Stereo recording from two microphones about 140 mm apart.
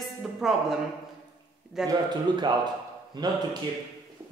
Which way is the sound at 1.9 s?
30° right (ahead or behind).